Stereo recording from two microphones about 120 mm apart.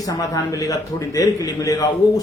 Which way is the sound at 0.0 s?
30° left (ahead or behind).